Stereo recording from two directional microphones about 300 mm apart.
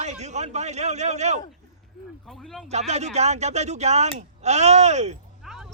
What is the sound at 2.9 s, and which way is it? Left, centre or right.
Speech, right.